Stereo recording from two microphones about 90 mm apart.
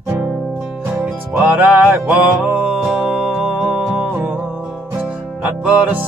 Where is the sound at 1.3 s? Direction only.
15° right (ahead or behind).